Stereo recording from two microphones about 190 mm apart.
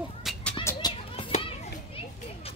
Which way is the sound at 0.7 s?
25° left (ahead or behind).